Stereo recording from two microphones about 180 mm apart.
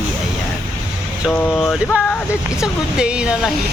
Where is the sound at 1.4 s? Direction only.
Centre (ahead or behind).